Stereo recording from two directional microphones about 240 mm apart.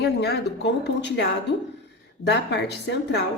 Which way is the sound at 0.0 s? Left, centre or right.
Left.